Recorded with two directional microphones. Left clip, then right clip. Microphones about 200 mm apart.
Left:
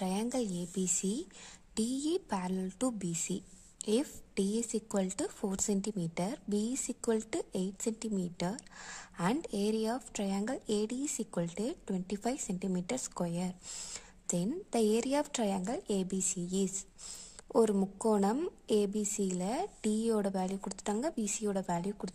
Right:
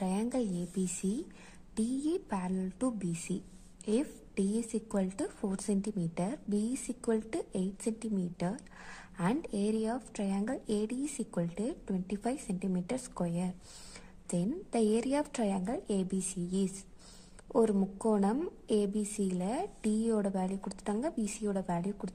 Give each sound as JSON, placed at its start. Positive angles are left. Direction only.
{"t": 0.0, "sound": "a woman's voice", "side_deg": 20}